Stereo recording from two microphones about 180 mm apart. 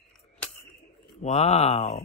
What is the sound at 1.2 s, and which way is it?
Speech, 40° left (ahead or behind).